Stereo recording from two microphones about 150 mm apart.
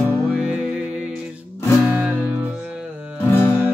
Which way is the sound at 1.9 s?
10° right (ahead or behind).